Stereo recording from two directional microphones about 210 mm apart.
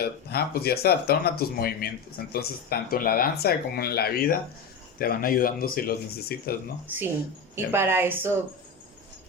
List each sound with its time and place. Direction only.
0.0 s speech: 50° left (ahead or behind)
7.5 s a woman's voice: 10° right (ahead or behind)